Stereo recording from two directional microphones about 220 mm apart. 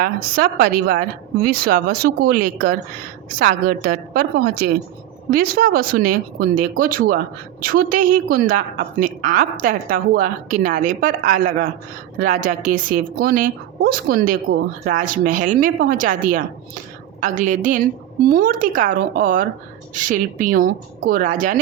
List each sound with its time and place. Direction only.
0.0 s a woman's voice: 45° right (ahead or behind)